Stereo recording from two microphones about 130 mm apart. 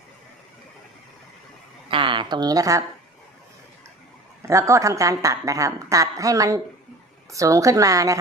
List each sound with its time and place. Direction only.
1.9 s a woman's voice: 40° right (ahead or behind)
4.4 s a woman's voice: 25° right (ahead or behind)